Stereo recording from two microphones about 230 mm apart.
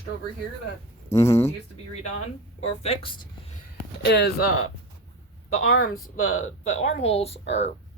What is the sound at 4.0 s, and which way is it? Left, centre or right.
Speech, left.